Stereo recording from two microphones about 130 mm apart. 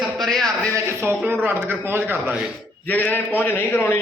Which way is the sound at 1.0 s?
15° right (ahead or behind).